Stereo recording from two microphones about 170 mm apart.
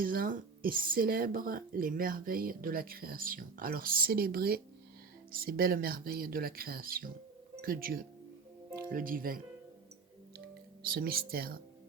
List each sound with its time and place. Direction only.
0.0 s speech: 55° right (ahead or behind)
10.8 s speech: 60° right (ahead or behind)